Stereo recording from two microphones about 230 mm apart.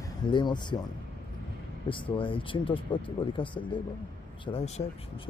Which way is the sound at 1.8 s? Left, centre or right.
Left.